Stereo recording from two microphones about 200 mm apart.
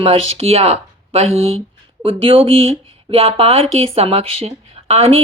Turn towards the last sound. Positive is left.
turn(degrees=-30)  # may be behind; listen again after turning